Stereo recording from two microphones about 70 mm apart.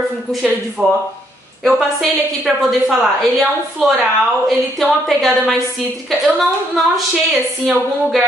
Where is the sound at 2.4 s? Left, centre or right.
Centre.